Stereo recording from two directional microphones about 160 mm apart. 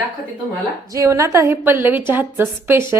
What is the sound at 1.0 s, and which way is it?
A woman's voice, 20° right (ahead or behind).